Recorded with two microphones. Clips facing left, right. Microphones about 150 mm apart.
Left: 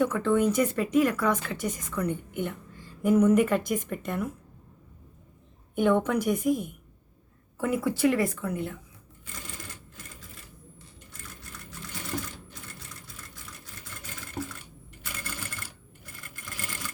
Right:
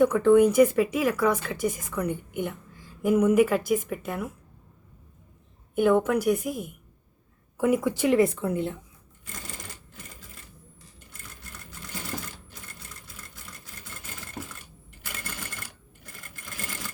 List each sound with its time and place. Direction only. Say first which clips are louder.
0.0 s a woman's voice: right 6 dB; 15° right (ahead or behind)
5.7 s a woman's voice: right 2 dB; 5° right (ahead or behind)
7.6 s speech: right 2 dB; 15° right (ahead or behind)